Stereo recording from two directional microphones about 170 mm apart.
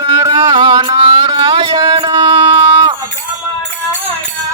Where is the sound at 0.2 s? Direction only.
20° right (ahead or behind).